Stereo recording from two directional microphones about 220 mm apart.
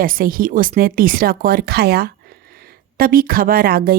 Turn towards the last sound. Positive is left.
turn(degrees=-40)  # may be behind; listen again after turning